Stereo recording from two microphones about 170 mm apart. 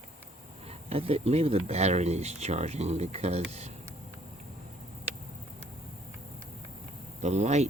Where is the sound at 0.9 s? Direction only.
35° right (ahead or behind).